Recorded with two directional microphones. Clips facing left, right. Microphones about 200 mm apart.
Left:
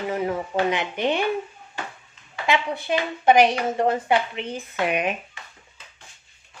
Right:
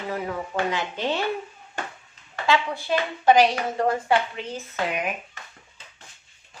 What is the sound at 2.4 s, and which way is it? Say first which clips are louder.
Speech: even; 20° left (ahead or behind).